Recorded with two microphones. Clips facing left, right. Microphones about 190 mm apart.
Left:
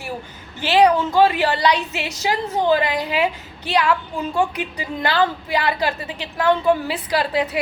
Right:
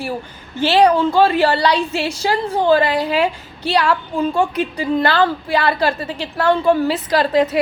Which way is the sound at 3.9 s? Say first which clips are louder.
Right 4 dB; 15° left (ahead or behind).